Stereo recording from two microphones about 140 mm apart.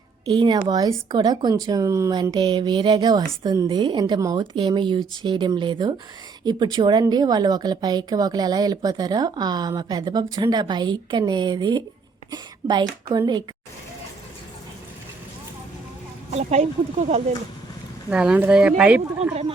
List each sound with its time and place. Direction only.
0.3 s a woman's voice: 35° right (ahead or behind)
16.3 s speech: 50° right (ahead or behind)
18.1 s speech: 5° right (ahead or behind)